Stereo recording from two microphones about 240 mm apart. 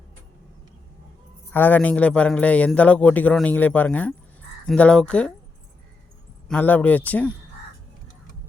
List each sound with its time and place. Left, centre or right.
1.5 s a man's voice: centre
6.5 s speech: centre